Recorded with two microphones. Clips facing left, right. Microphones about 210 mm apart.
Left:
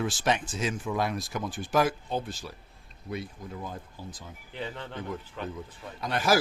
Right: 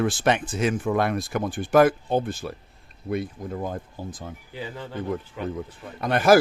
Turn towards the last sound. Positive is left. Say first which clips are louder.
# right 8 dB
turn(degrees=-55)  # may be behind; listen again after turning